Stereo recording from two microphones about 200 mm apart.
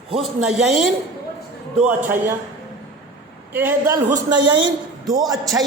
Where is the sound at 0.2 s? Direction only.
Centre (ahead or behind).